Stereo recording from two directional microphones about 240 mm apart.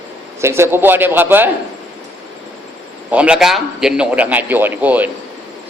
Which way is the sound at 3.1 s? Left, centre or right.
Centre.